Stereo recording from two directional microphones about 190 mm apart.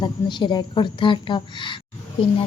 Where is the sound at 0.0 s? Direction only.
25° left (ahead or behind).